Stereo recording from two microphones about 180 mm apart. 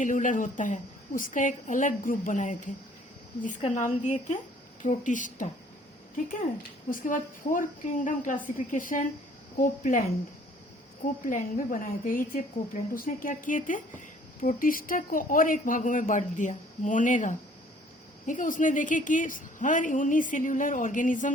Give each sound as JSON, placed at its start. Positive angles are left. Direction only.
{"t": 0.0, "sound": "a woman's voice", "side_deg": 45}
{"t": 11.0, "sound": "a woman's voice", "side_deg": 50}